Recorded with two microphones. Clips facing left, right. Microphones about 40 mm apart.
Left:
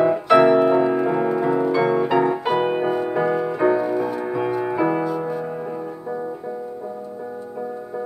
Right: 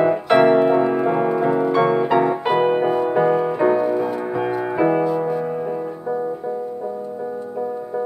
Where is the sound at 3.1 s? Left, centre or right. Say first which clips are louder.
Right 5 dB; right.